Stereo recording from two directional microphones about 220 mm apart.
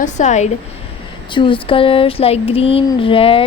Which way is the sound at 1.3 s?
20° left (ahead or behind).